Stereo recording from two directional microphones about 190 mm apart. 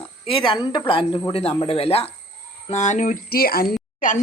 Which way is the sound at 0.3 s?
25° left (ahead or behind).